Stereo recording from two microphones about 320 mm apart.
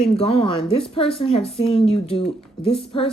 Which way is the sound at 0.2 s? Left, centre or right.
Centre.